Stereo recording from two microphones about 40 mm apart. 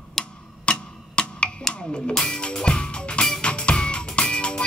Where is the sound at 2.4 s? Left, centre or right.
Left.